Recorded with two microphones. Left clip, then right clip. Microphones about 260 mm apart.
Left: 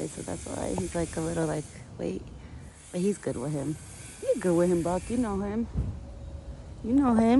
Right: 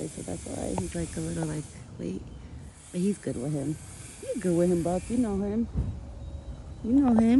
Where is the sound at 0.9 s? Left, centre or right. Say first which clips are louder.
Left 4 dB; left.